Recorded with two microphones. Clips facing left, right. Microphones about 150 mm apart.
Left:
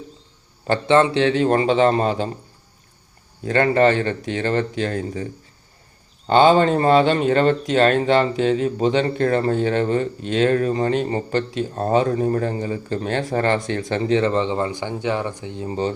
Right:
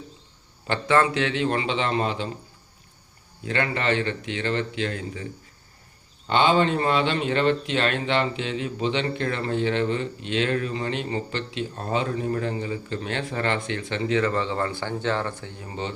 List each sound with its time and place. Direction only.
0.9 s speech: 25° left (ahead or behind); by 2.3 s 40° left (ahead or behind)
3.4 s speech: 40° left (ahead or behind); by 15.7 s 20° left (ahead or behind)